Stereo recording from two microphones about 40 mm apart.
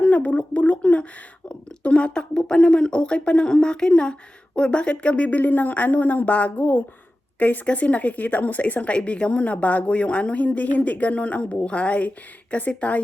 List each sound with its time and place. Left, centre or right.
0.0 s a sound: left
1.5 s speech: left
5.3 s speech: left
6.6 s speech: left
7.3 s speech: left